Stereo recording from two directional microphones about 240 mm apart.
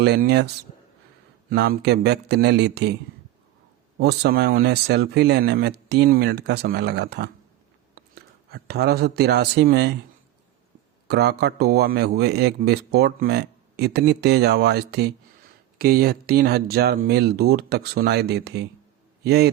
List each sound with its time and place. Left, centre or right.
0.0 s speech: right
4.0 s speech: right
11.1 s a man's voice: right